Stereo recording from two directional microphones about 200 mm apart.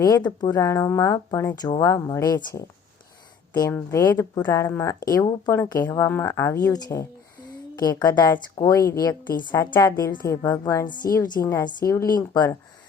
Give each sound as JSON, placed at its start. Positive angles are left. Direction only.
{"t": 0.0, "sound": "a woman's voice", "side_deg": 20}